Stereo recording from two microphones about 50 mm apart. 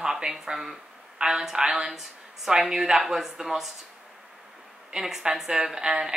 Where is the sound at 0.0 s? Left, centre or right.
Centre.